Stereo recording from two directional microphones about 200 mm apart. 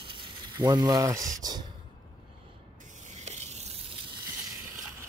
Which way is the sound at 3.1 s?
35° right (ahead or behind).